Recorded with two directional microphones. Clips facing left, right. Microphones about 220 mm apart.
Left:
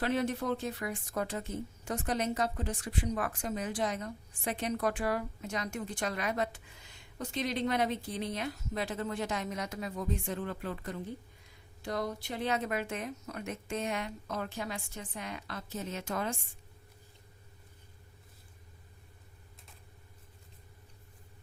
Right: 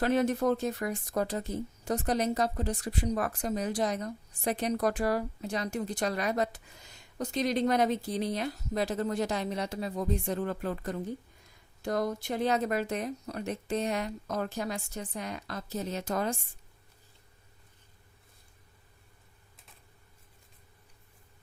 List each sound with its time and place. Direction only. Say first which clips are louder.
0.0 s speech: right 5 dB; 45° right (ahead or behind)